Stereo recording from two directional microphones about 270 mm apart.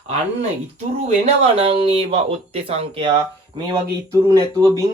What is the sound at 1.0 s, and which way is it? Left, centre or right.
Speech, right.